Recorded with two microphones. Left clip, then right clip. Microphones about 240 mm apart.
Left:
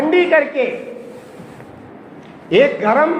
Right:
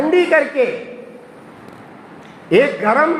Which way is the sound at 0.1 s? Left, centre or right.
Right.